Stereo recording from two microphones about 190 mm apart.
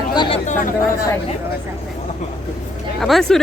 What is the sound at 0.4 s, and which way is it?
Speech, 40° left (ahead or behind).